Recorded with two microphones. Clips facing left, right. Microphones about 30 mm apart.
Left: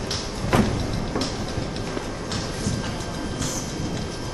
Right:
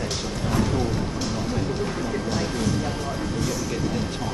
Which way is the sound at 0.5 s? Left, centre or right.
Left.